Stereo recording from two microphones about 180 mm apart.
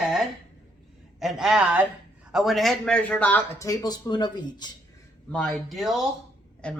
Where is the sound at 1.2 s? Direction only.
Centre (ahead or behind); by 4.7 s 25° left (ahead or behind).